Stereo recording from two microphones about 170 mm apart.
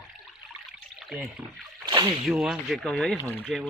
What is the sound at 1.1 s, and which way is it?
Speech, 5° right (ahead or behind).